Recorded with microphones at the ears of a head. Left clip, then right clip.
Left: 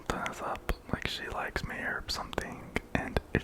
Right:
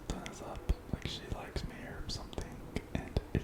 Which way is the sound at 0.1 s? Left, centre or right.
Left.